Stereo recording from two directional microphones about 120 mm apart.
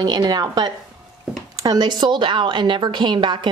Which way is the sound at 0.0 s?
35° right (ahead or behind).